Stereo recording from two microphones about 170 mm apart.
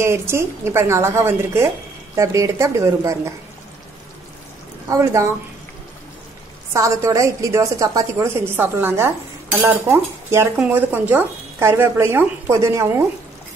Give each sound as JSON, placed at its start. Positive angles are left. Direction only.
{"t": 0.0, "sound": "a woman's voice", "side_deg": -15}
{"t": 4.8, "sound": "a woman's voice", "side_deg": -20}
{"t": 6.7, "sound": "a woman's voice", "side_deg": -20}